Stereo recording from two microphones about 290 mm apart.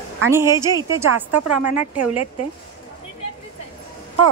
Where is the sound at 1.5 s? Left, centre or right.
Right.